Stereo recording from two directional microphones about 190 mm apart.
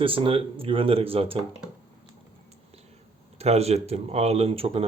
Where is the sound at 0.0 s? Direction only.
30° right (ahead or behind).